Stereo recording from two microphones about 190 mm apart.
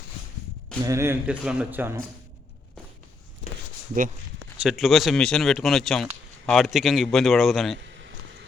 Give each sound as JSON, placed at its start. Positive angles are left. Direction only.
{"t": 0.9, "sound": "speech", "side_deg": -15}
{"t": 4.5, "sound": "speech", "side_deg": -5}
{"t": 7.8, "sound": "a sound", "side_deg": -70}